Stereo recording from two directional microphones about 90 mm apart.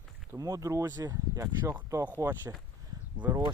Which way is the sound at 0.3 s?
40° right (ahead or behind).